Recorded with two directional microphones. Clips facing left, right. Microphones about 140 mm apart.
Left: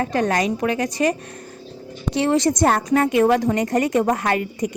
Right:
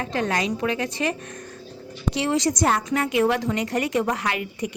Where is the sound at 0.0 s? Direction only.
45° left (ahead or behind).